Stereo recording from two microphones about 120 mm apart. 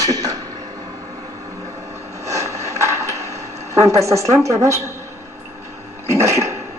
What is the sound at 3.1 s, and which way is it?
Speech, 25° right (ahead or behind).